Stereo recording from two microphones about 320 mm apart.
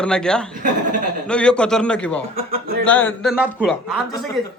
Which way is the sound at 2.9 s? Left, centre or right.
Centre.